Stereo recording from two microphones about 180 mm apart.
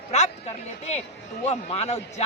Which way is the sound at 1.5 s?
35° left (ahead or behind).